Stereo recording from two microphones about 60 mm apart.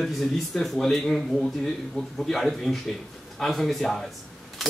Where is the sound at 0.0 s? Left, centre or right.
Centre.